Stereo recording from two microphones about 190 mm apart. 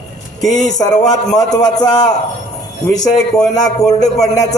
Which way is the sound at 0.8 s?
20° left (ahead or behind).